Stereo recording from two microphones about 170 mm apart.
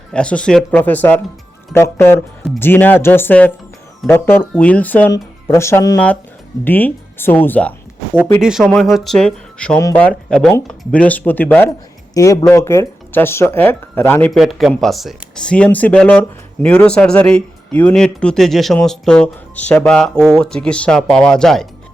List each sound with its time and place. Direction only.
0.1 s speech: 5° left (ahead or behind)
8.4 s speech: centre (ahead or behind)